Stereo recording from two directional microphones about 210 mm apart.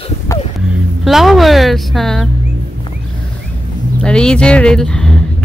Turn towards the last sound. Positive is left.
turn(degrees=5)  # may be behind; listen again after turning